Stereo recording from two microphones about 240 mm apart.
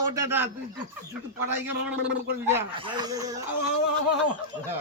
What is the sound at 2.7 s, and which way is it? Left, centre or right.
Speech, centre.